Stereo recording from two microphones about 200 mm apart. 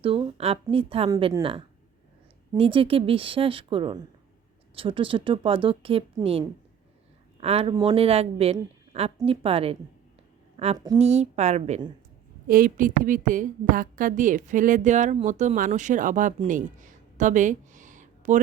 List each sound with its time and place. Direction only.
0.0 s a woman's voice: 30° right (ahead or behind)
1.1 s a woman's voice: 15° right (ahead or behind)
1.4 s a woman's voice: 25° right (ahead or behind)
7.4 s a woman's voice: 30° right (ahead or behind)
12.5 s a woman's voice: 45° right (ahead or behind)